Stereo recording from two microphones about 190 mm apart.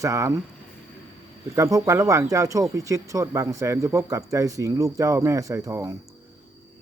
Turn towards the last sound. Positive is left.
turn(degrees=-15)  # may be behind; listen again after turning